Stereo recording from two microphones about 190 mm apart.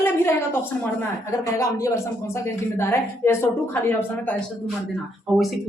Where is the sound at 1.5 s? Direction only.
15° left (ahead or behind).